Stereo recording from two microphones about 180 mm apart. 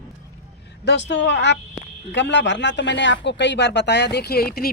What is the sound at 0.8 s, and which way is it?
Speech, 75° left (ahead or behind).